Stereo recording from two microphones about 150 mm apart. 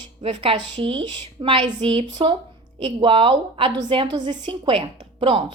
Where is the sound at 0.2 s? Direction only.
35° right (ahead or behind).